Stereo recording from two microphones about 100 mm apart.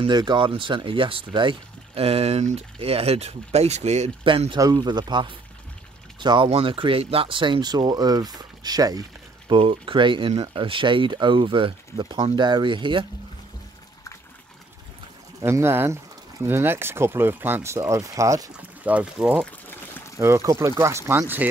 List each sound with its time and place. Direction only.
0.0 s speech: 50° right (ahead or behind)
2.0 s speech: 90° right; by 4.6 s 60° right (ahead or behind)
4.6 s speech: 40° right (ahead or behind)
9.5 s speech: 60° right (ahead or behind)
15.4 s speech: 25° right (ahead or behind)
18.6 s speech: 15° right (ahead or behind)
20.2 s speech: 30° right (ahead or behind)
21.2 s speech: 15° right (ahead or behind)